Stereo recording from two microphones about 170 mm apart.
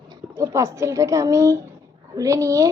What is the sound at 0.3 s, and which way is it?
A woman's voice, 20° right (ahead or behind).